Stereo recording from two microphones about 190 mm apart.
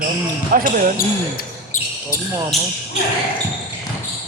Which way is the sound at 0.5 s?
50° right (ahead or behind).